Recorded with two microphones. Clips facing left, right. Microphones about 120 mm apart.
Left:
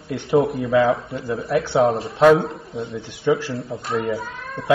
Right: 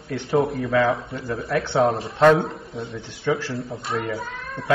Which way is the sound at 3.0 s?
15° left (ahead or behind).